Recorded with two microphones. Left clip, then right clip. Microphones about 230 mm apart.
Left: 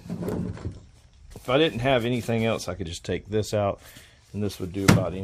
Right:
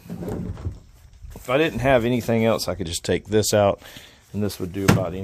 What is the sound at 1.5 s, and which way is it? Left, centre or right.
Speech, right.